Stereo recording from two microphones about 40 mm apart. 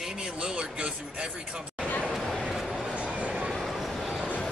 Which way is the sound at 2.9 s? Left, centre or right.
Right.